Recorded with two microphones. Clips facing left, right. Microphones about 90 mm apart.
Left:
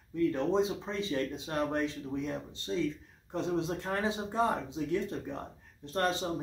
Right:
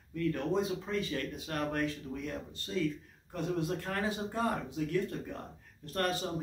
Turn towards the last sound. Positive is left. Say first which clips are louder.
# left 2 dB
turn(degrees=20)  # may be behind; listen again after turning